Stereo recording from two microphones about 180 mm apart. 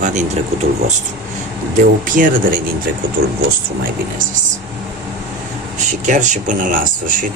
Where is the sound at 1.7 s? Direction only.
50° right (ahead or behind).